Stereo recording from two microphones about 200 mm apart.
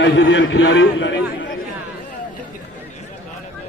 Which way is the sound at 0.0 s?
65° left (ahead or behind).